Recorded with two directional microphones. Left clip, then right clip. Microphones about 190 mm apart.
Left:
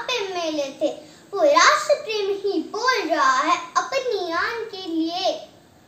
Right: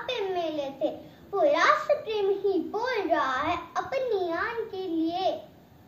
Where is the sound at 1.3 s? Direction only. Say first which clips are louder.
Left 6 dB; 20° left (ahead or behind).